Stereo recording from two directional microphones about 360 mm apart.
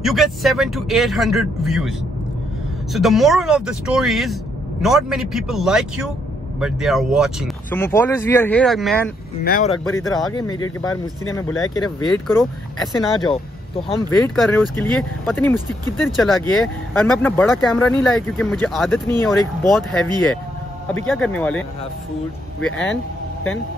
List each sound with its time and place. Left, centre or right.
0.0 s speech: centre
9.4 s speech: left
9.8 s speech: centre